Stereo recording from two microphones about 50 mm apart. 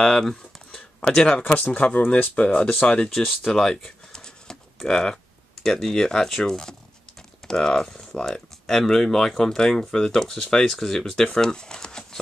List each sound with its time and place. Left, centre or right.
0.0 s speech: centre
1.4 s speech: left
3.4 s pigeon: centre
7.2 s speech: centre